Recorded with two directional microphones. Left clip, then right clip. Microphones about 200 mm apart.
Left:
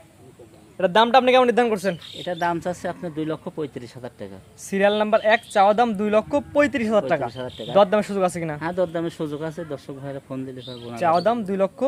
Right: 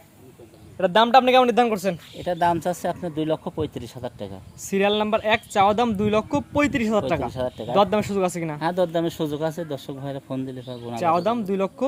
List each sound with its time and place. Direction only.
0.8 s speech: 5° left (ahead or behind)
2.2 s speech: 40° right (ahead or behind)
4.6 s speech: 5° left (ahead or behind)
7.3 s speech: 35° right (ahead or behind)
7.7 s speech: centre (ahead or behind)
8.6 s speech: 35° right (ahead or behind)
9.6 s speech: 65° right (ahead or behind)
10.3 s speech: 40° right (ahead or behind)
10.9 s speech: centre (ahead or behind)